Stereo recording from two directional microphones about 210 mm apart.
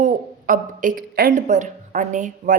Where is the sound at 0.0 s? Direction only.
40° right (ahead or behind).